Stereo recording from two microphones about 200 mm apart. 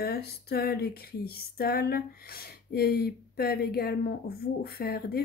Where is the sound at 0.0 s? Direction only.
50° left (ahead or behind).